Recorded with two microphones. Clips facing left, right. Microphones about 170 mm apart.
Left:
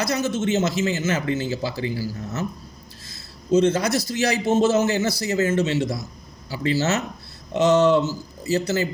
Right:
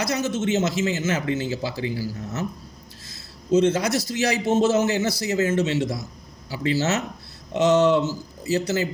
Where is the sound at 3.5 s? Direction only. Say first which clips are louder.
Left 1 dB; 20° right (ahead or behind).